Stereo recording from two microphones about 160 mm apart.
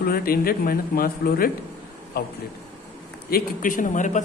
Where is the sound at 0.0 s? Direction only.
65° left (ahead or behind).